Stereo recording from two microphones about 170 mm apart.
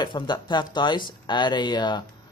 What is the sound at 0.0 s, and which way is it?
Speech, 25° left (ahead or behind).